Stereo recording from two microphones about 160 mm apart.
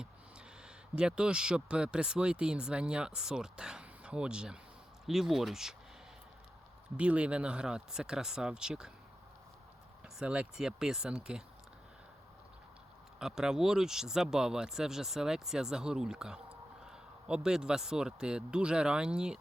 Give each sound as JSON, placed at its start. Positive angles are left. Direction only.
{"t": 0.9, "sound": "speech", "side_deg": -5}
{"t": 6.9, "sound": "speech", "side_deg": -10}
{"t": 10.2, "sound": "speech", "side_deg": -5}
{"t": 13.1, "sound": "speech", "side_deg": -5}